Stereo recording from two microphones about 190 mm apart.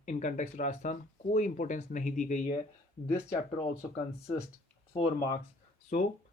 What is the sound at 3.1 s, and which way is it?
Speech, 15° left (ahead or behind).